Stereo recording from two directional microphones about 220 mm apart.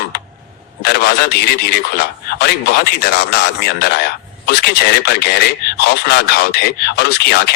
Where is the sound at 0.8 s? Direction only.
50° left (ahead or behind).